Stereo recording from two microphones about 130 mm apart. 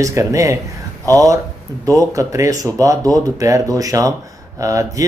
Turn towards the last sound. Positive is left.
turn(degrees=-25)  # may be behind; listen again after turning